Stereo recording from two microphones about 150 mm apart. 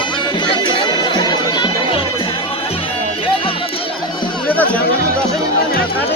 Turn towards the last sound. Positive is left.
turn(degrees=10)  # may be behind; listen again after turning